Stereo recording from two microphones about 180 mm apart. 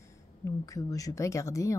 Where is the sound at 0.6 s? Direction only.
20° left (ahead or behind).